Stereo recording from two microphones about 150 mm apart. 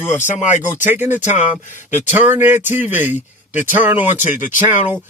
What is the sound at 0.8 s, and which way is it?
Speech, 15° right (ahead or behind).